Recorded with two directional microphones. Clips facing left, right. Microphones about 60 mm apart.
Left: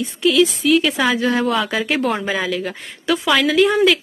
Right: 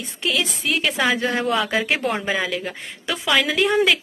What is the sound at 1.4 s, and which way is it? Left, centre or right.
Speech, centre.